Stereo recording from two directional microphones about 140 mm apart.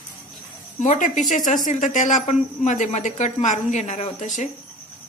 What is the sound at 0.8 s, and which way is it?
A woman's voice, 65° left (ahead or behind).